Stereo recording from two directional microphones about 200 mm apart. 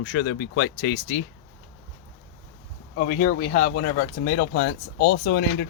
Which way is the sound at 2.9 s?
40° left (ahead or behind).